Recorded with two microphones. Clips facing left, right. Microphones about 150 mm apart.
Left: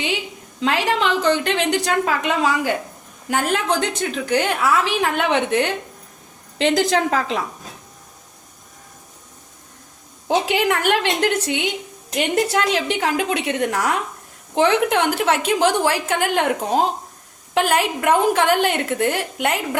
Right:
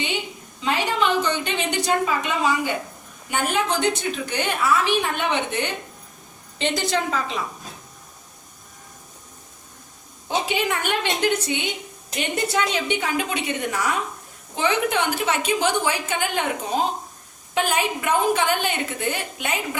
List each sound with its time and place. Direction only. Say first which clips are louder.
0.6 s a woman's voice: left 3 dB; 90° left
10.2 s a woman's voice: left 5 dB; 90° left
12.7 s a woman's voice: left 3 dB; 90° left; by 19.6 s 75° left (ahead or behind)